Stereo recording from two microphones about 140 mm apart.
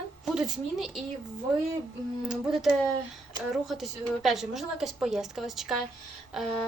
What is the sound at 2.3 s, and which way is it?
A woman's voice, 5° right (ahead or behind).